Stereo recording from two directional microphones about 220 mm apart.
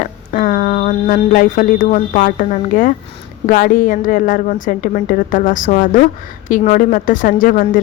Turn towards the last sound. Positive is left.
turn(degrees=35)  # may be behind; listen again after turning